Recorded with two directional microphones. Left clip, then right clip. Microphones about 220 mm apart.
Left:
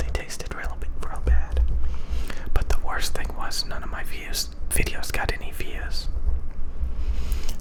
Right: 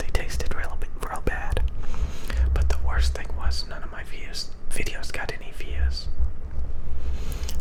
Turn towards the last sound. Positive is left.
turn(degrees=0)  # may be behind; listen again after turning